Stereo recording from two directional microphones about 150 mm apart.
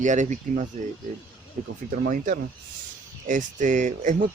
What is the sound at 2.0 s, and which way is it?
Speech, 65° right (ahead or behind).